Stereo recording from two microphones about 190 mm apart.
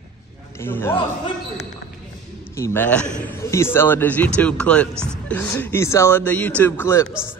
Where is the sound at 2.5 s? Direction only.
15° left (ahead or behind).